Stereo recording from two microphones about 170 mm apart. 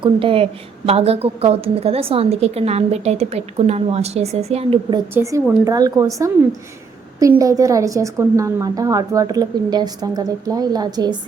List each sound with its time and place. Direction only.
0.0 s a woman's voice: 30° right (ahead or behind)
5.1 s a woman's voice: 20° right (ahead or behind)